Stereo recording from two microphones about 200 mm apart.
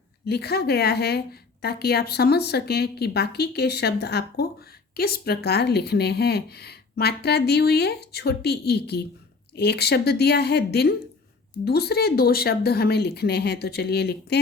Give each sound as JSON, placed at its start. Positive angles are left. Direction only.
{"t": 0.3, "sound": "a woman's voice", "side_deg": 55}